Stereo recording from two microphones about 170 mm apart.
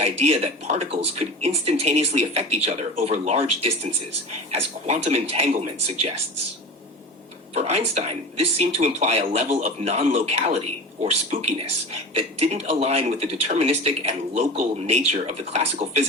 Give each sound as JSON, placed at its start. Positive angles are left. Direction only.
{"t": 0.0, "sound": "speech", "side_deg": -40}
{"t": 7.5, "sound": "speech", "side_deg": -40}